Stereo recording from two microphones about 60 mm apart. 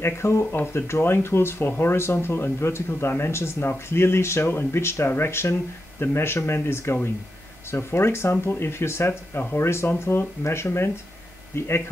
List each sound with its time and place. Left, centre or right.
0.0 s speech: left
0.5 s speech: left
0.8 s speech: left